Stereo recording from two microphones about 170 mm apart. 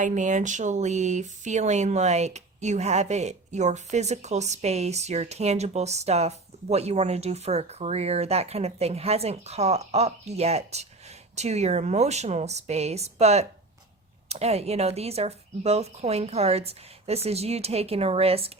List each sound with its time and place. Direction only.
0.0 s speech: 45° right (ahead or behind)